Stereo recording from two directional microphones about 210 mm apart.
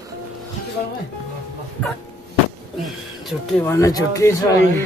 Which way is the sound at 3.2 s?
10° left (ahead or behind).